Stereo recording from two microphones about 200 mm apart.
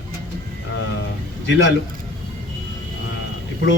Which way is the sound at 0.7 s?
65° left (ahead or behind).